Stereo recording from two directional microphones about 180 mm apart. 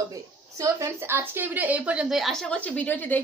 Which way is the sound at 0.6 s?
15° right (ahead or behind).